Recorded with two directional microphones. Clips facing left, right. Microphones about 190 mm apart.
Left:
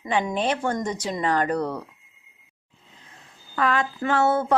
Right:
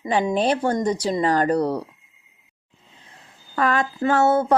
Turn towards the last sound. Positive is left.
turn(degrees=-40)  # may be behind; listen again after turning